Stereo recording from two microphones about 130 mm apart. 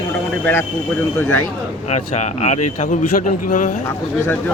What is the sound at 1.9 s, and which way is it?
Speech, 60° left (ahead or behind).